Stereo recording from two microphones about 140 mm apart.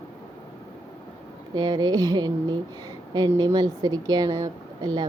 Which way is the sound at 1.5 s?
30° right (ahead or behind).